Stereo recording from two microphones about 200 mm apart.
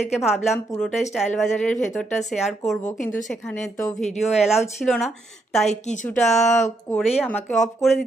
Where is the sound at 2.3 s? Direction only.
Centre (ahead or behind).